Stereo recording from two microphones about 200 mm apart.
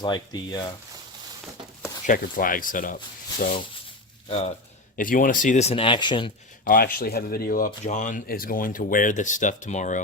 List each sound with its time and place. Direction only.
0.0 s speech: 20° left (ahead or behind)
2.0 s speech: 45° left (ahead or behind)
4.3 s speech: 35° left (ahead or behind)
6.7 s speech: 45° left (ahead or behind)